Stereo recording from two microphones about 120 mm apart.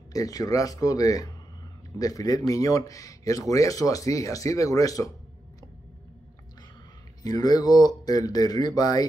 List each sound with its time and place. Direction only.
0.1 s speech: 30° left (ahead or behind)
7.2 s speech: 35° left (ahead or behind)